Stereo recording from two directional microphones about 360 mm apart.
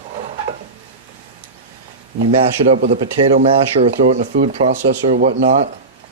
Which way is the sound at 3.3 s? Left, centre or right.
Centre.